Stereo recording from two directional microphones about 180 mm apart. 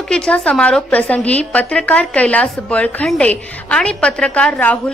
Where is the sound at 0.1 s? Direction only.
5° left (ahead or behind).